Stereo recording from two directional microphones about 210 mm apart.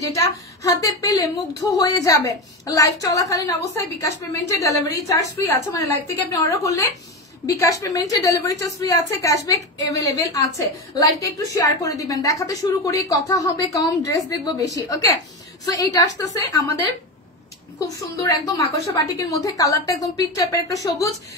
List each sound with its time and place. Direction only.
0.1 s a woman's voice: 15° left (ahead or behind)
17.7 s a woman's voice: 15° left (ahead or behind)